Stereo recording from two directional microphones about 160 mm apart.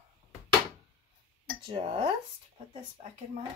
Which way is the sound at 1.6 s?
35° right (ahead or behind).